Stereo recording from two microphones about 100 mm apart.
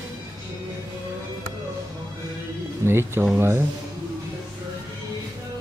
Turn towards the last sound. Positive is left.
turn(degrees=-25)  # may be behind; listen again after turning